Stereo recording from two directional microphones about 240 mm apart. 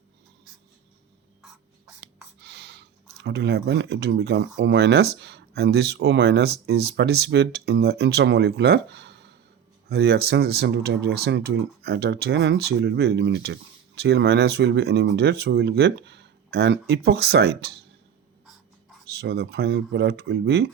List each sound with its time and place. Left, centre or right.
2.4 s a sound: right
3.2 s speech: right
19.1 s speech: right